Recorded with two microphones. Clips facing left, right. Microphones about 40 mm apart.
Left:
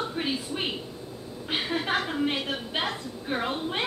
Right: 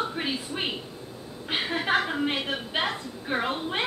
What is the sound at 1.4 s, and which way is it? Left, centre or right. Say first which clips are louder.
A woman's voice: right 1 dB; centre.